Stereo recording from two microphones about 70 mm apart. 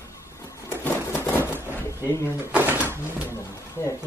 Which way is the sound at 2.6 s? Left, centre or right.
Right.